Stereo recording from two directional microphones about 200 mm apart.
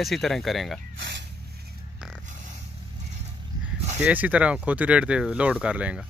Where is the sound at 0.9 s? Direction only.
60° right (ahead or behind).